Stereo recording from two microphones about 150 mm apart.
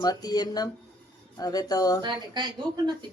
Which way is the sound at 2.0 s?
30° right (ahead or behind).